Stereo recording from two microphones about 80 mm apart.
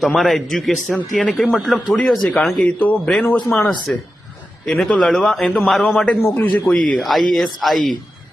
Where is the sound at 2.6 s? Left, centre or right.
Centre.